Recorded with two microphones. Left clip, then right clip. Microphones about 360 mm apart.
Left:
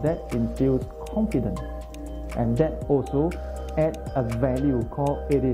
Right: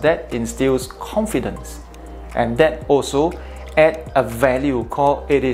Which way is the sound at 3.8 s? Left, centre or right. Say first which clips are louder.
Right 11 dB; centre.